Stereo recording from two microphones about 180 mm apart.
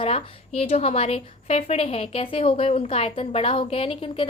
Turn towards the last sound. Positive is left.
turn(degrees=30)  # may be behind; listen again after turning